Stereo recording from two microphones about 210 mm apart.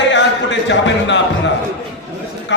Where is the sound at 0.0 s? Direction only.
60° left (ahead or behind).